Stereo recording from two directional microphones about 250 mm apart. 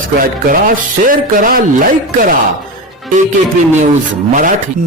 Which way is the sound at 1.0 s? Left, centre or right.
Right.